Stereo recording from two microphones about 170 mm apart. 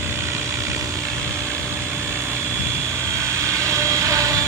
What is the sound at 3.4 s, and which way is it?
Vehicle, 15° right (ahead or behind).